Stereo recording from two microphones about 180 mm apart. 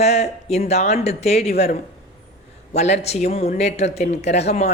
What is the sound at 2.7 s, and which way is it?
Speech, 40° left (ahead or behind).